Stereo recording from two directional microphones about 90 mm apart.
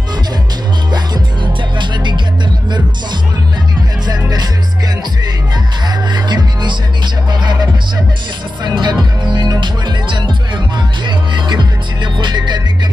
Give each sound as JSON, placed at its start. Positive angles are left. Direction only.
{"t": 0.9, "sound": "music", "side_deg": -55}
{"t": 4.1, "sound": "music", "side_deg": -50}
{"t": 6.1, "sound": "music", "side_deg": -55}
{"t": 8.6, "sound": "music", "side_deg": -55}
{"t": 11.1, "sound": "music", "side_deg": -55}